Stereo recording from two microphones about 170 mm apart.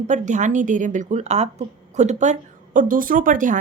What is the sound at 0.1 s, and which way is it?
A woman's voice, 45° right (ahead or behind).